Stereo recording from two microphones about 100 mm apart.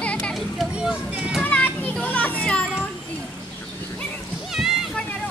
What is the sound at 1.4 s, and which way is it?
Children playing, 15° left (ahead or behind).